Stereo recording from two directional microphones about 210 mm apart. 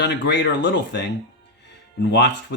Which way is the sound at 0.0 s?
55° left (ahead or behind).